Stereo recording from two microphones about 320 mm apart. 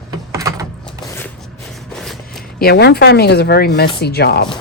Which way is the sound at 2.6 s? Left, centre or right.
Left.